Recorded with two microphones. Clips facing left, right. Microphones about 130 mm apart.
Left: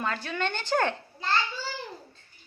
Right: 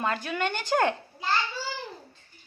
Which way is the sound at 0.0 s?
15° right (ahead or behind).